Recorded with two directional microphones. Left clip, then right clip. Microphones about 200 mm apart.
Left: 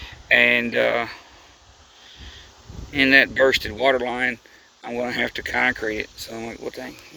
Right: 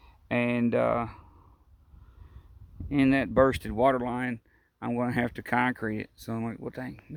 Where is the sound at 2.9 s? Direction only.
25° right (ahead or behind).